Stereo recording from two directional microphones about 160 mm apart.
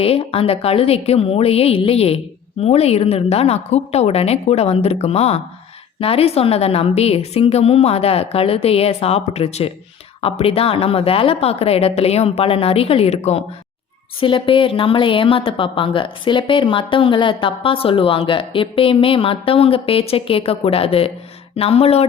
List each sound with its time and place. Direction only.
0.0 s speech: 35° left (ahead or behind)